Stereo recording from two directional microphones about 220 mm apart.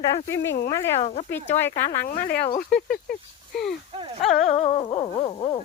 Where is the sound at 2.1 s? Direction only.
40° left (ahead or behind).